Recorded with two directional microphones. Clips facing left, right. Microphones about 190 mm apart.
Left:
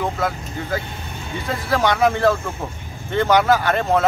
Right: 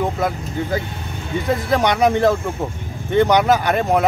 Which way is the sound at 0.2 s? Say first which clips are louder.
Even; 20° right (ahead or behind).